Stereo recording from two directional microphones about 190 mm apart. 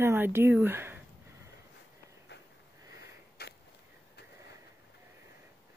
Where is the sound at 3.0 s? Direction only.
60° left (ahead or behind).